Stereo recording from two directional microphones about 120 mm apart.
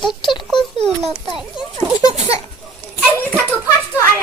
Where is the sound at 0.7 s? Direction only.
60° right (ahead or behind).